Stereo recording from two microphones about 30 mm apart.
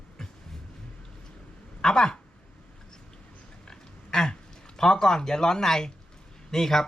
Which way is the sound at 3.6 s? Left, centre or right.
Left.